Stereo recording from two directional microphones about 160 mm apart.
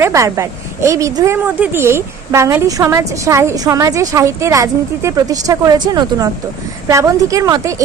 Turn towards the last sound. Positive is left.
turn(degrees=-20)  # may be behind; listen again after turning